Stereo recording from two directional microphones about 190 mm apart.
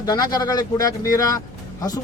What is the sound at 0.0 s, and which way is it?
Speech, 20° left (ahead or behind).